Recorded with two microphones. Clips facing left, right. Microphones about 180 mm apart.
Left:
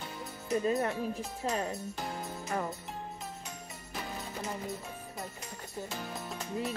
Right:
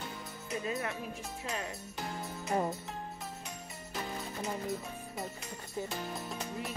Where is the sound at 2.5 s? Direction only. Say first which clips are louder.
Right 3 dB; 25° right (ahead or behind).